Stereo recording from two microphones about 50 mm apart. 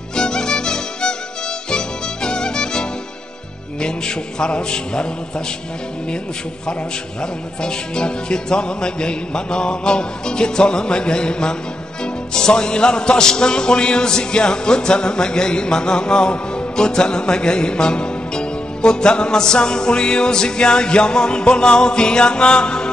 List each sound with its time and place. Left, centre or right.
0.1 s music: centre
3.8 s mantra: centre
7.6 s speech: centre